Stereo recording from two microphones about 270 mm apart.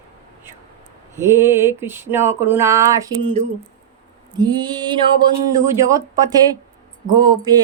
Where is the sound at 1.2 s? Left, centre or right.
Centre.